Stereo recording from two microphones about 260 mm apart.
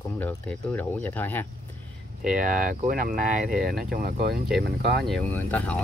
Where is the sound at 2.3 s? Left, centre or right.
Right.